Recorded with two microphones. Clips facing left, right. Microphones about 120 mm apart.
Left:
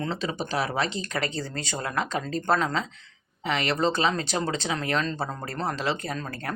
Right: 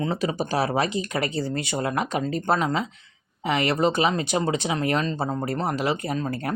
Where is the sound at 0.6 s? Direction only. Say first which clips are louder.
Right 4 dB; 35° right (ahead or behind); by 2.9 s 10° right (ahead or behind).